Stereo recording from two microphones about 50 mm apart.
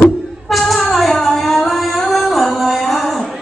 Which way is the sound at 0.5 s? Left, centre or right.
Centre.